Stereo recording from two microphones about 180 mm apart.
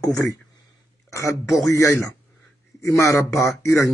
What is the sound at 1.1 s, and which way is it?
Speech, 15° left (ahead or behind).